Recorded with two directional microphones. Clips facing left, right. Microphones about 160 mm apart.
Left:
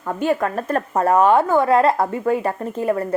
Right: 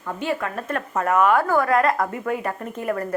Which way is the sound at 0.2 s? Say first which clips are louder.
Left 7 dB; 40° left (ahead or behind).